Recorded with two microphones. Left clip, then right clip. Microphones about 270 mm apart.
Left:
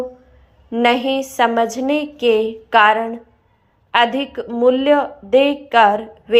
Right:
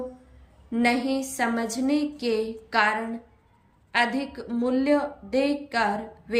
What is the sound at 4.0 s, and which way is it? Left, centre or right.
A woman's voice, left.